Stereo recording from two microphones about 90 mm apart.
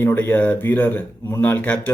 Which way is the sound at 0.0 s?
20° left (ahead or behind).